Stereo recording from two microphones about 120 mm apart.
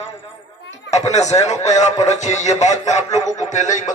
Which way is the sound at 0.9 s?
65° left (ahead or behind).